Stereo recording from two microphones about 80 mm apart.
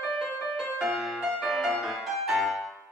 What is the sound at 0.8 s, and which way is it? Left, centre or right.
Music, centre.